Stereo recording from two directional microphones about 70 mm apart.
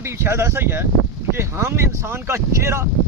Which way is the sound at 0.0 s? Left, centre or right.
Right.